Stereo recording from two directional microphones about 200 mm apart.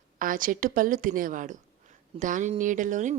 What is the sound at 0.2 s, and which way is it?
A woman's voice, 45° right (ahead or behind).